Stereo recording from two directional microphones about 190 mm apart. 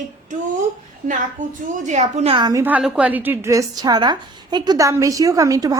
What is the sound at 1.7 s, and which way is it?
Speech, 40° right (ahead or behind).